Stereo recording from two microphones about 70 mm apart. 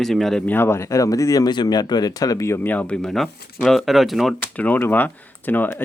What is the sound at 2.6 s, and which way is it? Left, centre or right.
Speech, left.